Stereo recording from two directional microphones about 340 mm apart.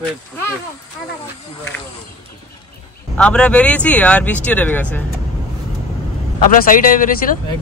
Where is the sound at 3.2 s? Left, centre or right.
Centre.